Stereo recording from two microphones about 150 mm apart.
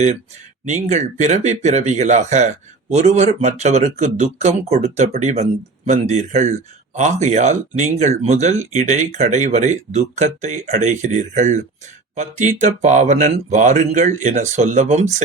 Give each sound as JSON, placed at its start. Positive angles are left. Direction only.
{"t": 0.6, "sound": "speech", "side_deg": -50}